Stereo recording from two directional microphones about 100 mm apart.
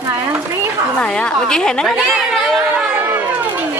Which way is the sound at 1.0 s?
10° left (ahead or behind).